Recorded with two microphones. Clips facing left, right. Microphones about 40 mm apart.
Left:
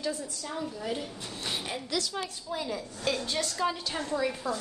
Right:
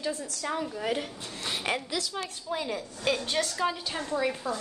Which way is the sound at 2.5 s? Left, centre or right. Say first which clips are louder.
Right 3 dB; right.